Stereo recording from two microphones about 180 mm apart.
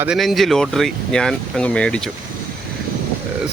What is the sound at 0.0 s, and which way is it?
Speech, centre (ahead or behind).